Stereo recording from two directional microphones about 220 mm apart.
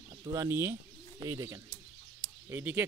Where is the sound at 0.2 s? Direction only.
15° right (ahead or behind).